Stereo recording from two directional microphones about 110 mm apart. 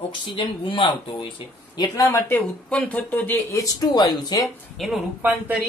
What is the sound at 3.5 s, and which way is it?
Speech, 35° left (ahead or behind).